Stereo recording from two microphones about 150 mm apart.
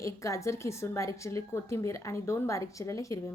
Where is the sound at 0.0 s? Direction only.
20° left (ahead or behind).